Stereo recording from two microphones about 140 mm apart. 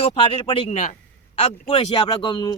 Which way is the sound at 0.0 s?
40° left (ahead or behind).